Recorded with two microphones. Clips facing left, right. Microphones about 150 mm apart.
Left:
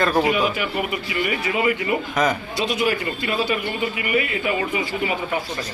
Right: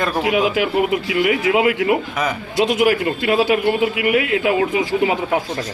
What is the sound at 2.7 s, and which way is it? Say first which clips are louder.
A man's voice: right 6 dB; 75° right (ahead or behind).